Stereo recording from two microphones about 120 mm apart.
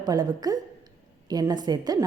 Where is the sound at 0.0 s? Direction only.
35° right (ahead or behind).